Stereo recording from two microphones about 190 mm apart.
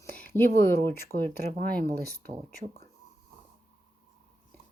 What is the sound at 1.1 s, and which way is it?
Speech, 50° right (ahead or behind).